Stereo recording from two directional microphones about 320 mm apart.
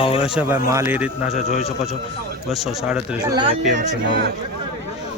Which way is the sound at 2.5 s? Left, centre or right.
Centre.